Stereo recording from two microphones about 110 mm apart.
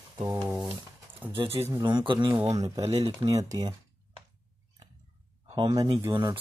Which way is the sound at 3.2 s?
30° right (ahead or behind).